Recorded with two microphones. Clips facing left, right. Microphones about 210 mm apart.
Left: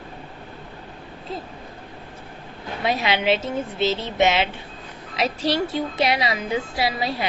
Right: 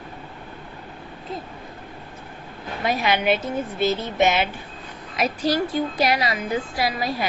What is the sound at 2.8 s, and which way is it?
A woman's voice, 25° left (ahead or behind).